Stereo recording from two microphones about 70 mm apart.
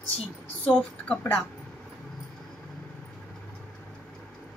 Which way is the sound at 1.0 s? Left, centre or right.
Left.